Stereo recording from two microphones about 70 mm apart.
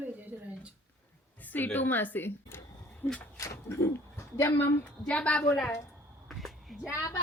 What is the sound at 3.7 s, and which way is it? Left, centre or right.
Speech, left.